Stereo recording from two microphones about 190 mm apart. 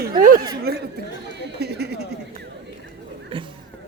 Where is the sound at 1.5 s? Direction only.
60° right (ahead or behind).